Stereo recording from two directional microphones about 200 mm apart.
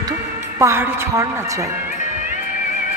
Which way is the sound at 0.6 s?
10° right (ahead or behind).